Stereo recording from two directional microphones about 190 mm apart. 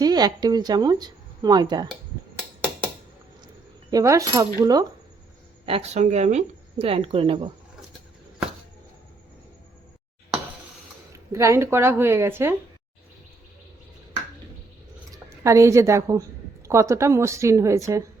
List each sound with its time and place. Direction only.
0.0 s speech: 20° right (ahead or behind)
3.9 s speech: 15° right (ahead or behind)
5.6 s speech: 30° right (ahead or behind)
11.3 s a woman's voice: 15° right (ahead or behind)
15.1 s a woman's voice: 15° right (ahead or behind)